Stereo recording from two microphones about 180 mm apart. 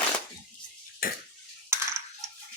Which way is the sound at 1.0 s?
55° left (ahead or behind).